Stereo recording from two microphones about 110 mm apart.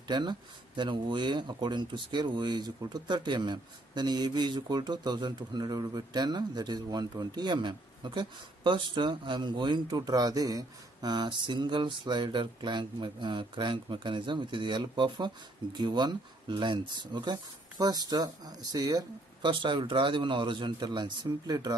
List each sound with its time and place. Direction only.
0.1 s speech: 45° right (ahead or behind)
19.6 s speech: 50° right (ahead or behind)